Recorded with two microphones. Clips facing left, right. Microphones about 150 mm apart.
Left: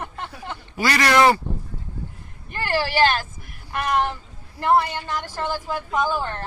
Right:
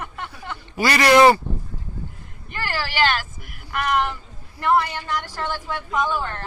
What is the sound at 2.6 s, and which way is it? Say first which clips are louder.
A woman's voice: left 3 dB; 40° left (ahead or behind).